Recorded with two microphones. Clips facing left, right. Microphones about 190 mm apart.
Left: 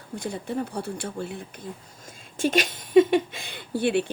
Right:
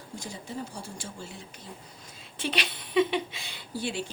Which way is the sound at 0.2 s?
60° left (ahead or behind).